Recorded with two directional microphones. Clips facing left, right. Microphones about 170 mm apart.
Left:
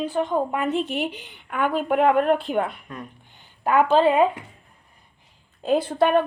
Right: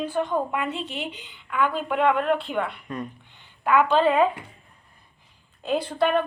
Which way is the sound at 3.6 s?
40° left (ahead or behind).